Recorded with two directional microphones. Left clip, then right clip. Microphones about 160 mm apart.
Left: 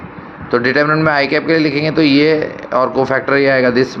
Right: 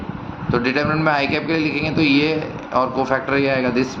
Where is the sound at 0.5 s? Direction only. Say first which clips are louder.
Left 7 dB; 45° left (ahead or behind).